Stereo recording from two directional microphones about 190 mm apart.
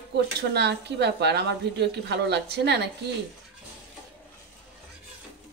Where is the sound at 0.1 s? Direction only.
60° right (ahead or behind).